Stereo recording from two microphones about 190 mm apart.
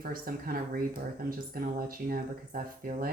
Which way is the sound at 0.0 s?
50° right (ahead or behind).